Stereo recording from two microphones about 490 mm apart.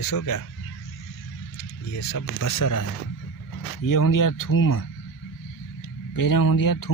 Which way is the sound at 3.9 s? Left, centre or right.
Left.